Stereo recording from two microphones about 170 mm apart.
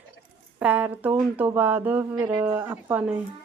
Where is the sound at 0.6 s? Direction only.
10° right (ahead or behind).